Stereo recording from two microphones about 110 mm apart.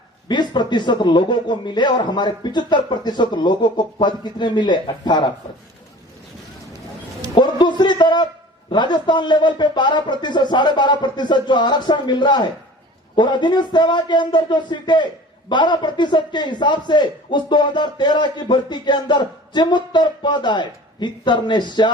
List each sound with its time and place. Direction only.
0.3 s a man's voice: 40° left (ahead or behind)
7.3 s a man's voice: 45° left (ahead or behind)